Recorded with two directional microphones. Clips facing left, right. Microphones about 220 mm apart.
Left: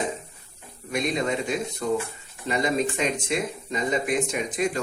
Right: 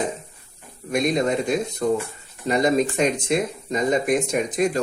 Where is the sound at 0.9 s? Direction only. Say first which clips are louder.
Right 5 dB; 45° right (ahead or behind).